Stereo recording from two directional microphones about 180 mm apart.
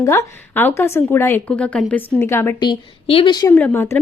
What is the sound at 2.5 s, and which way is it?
Speech, 25° left (ahead or behind).